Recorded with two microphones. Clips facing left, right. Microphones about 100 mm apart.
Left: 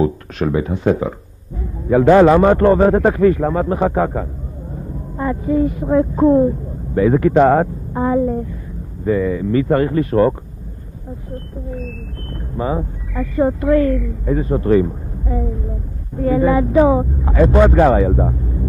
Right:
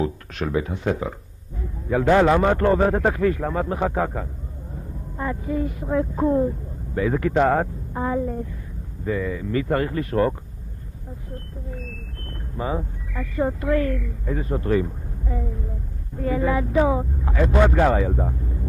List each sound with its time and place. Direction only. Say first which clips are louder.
0.0 s a man's voice: left 8 dB; 30° left (ahead or behind)
12.3 s a man's voice: left 6 dB; 30° left (ahead or behind)